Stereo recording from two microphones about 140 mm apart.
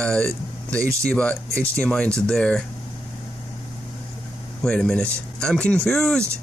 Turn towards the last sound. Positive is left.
turn(degrees=5)  # may be behind; listen again after turning